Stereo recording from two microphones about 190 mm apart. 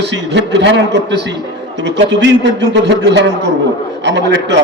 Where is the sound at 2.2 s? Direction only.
65° right (ahead or behind).